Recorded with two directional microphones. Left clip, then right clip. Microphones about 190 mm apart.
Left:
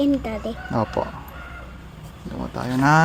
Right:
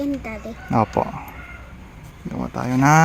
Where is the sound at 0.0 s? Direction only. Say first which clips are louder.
Left 5 dB; 10° left (ahead or behind).